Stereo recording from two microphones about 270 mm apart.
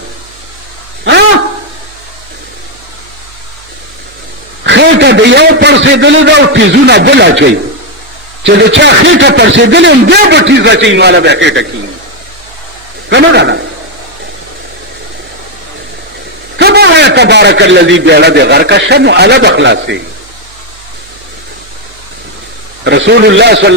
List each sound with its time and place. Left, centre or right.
4.6 s a man's voice: right
13.1 s a man's voice: right
16.6 s a man's voice: right
22.8 s a man's voice: right